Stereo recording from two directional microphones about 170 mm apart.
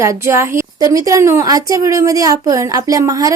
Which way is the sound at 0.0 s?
15° right (ahead or behind).